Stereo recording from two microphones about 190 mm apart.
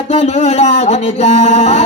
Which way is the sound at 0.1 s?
35° left (ahead or behind).